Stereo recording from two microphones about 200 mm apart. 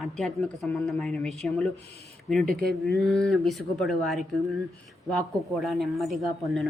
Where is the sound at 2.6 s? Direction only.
Centre (ahead or behind).